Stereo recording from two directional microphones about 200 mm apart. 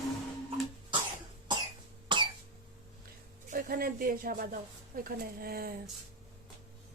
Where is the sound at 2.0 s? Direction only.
25° right (ahead or behind).